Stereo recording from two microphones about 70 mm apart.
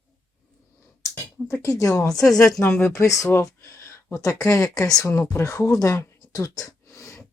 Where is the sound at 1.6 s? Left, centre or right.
Left.